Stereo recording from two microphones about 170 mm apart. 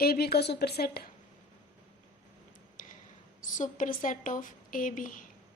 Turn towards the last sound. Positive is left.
turn(degrees=50)  # may be behind; listen again after turning